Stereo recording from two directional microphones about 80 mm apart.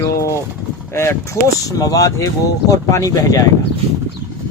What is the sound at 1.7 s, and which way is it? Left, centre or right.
Speech, left.